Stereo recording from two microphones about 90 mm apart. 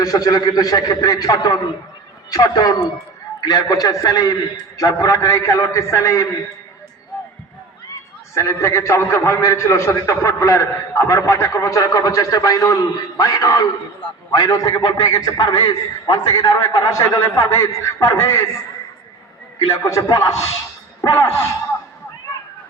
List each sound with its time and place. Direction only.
0.0 s a man's voice: 45° left (ahead or behind)
8.4 s a man's voice: 30° left (ahead or behind)
19.5 s a man's voice: 35° left (ahead or behind)